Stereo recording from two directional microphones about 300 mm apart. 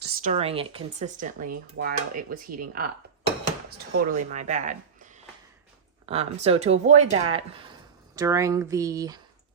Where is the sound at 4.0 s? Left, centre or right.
Right.